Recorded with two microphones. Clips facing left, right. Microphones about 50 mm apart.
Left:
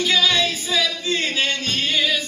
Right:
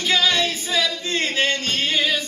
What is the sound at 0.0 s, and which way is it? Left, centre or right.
Singing, right.